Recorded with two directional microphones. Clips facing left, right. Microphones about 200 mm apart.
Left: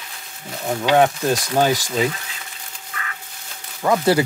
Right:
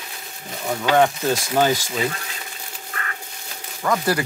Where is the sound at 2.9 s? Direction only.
45° right (ahead or behind).